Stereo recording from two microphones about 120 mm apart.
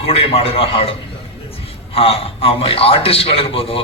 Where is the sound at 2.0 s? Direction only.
55° left (ahead or behind).